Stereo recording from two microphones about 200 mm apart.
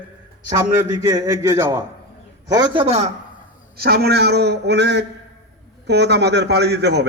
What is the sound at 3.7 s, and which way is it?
A man's voice, 50° right (ahead or behind).